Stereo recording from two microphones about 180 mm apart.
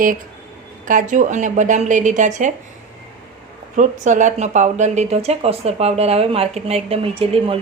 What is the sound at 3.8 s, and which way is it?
Speech, 45° right (ahead or behind).